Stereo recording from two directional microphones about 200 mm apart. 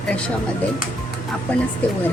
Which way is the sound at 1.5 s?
5° left (ahead or behind).